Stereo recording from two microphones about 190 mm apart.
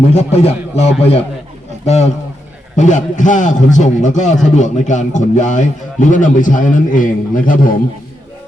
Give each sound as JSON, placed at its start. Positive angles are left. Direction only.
{"t": 0.1, "sound": "a man's voice", "side_deg": 35}